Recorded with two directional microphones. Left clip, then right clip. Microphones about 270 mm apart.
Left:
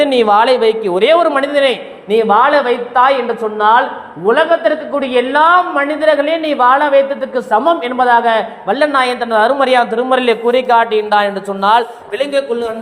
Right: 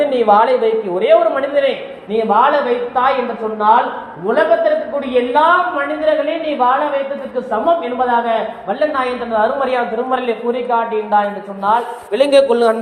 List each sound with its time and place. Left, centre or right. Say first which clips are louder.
0.0 s a woman's voice: left 2 dB; left
4.4 s a woman's voice: right 2 dB; left
12.3 s a man's voice: right 7 dB; centre